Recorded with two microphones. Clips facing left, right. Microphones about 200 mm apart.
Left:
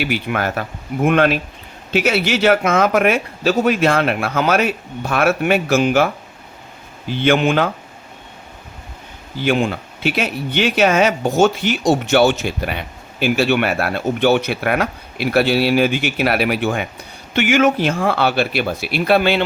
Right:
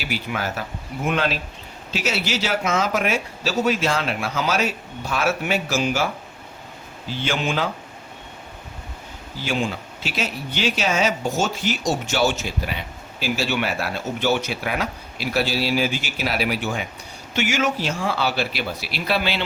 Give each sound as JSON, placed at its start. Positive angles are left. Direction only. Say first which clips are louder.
{"t": 0.0, "sound": "speech", "louder": "left 7 dB", "side_deg": 60}
{"t": 7.1, "sound": "speech", "louder": "left 9 dB", "side_deg": 60}
{"t": 9.4, "sound": "speech", "louder": "left 7 dB", "side_deg": 60}